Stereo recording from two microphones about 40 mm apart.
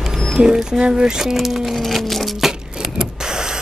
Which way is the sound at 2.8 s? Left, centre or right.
Centre.